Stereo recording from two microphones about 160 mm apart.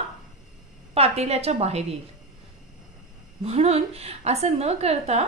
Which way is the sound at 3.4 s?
40° right (ahead or behind).